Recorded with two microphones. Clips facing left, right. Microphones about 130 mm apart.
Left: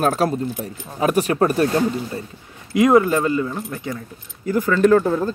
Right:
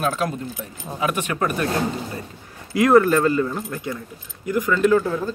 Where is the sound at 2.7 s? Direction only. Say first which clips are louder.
Even; 20° left (ahead or behind).